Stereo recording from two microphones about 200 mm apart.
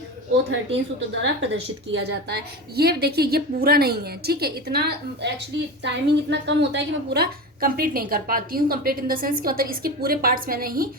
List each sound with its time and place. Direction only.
0.5 s a woman's voice: 70° right (ahead or behind)
2.0 s a woman's voice: 55° right (ahead or behind)